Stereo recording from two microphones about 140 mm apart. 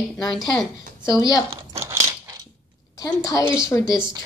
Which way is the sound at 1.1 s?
25° left (ahead or behind).